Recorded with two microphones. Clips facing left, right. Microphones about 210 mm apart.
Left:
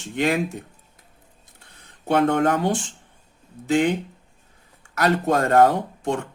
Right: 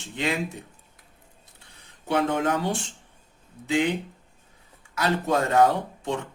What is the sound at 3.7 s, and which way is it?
Speech, 50° left (ahead or behind).